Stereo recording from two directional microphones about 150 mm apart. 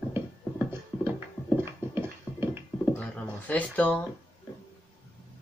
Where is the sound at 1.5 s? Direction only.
15° right (ahead or behind).